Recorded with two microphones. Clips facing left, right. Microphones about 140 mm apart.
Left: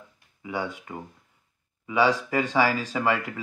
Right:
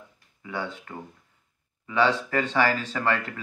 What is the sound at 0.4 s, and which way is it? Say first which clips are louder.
Speech: left 2 dB; 15° left (ahead or behind).